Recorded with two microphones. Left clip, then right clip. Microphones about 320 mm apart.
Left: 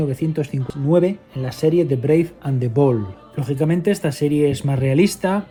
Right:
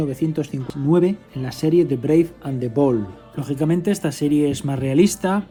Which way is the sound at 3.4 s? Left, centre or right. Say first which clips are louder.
Left 1 dB; centre.